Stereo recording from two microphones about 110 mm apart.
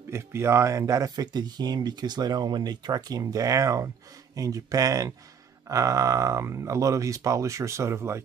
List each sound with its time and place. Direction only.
0.1 s speech: 25° right (ahead or behind)